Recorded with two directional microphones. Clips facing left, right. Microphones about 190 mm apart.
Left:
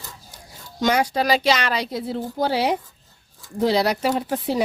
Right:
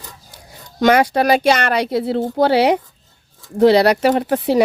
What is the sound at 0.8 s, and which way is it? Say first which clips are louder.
Speech: right 6 dB; 65° right (ahead or behind).